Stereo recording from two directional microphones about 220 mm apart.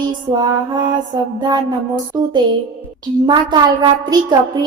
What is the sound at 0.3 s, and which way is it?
Speech, 20° right (ahead or behind).